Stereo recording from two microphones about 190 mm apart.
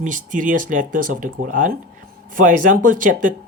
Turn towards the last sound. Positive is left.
turn(degrees=-45)  # may be behind; listen again after turning